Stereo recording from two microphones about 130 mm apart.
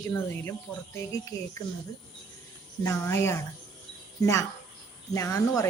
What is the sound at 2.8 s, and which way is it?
Speech, 20° left (ahead or behind).